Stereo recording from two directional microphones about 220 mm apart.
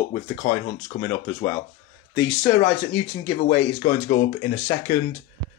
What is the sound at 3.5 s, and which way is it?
Speech, 30° left (ahead or behind).